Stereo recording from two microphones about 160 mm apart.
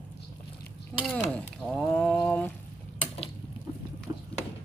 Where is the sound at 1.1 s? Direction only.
5° left (ahead or behind).